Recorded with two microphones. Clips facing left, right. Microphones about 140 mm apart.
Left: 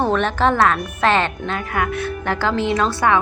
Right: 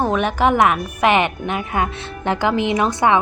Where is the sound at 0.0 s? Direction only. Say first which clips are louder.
Even; 10° right (ahead or behind).